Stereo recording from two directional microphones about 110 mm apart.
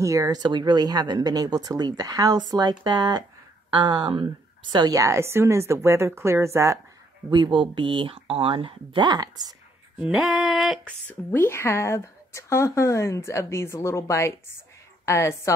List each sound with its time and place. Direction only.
0.0 s speech: 30° right (ahead or behind)
4.7 s a woman's voice: 30° right (ahead or behind)
7.2 s speech: 45° right (ahead or behind)
9.9 s female singing: 5° right (ahead or behind)
11.1 s a woman's voice: 20° left (ahead or behind)